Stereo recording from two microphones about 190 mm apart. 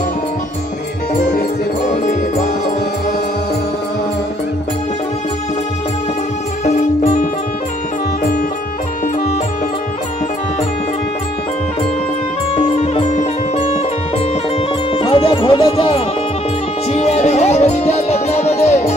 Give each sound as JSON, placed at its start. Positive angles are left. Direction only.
{"t": 1.1, "sound": "music", "side_deg": 40}
{"t": 6.6, "sound": "music", "side_deg": 35}
{"t": 8.2, "sound": "music", "side_deg": 50}
{"t": 12.5, "sound": "music", "side_deg": 35}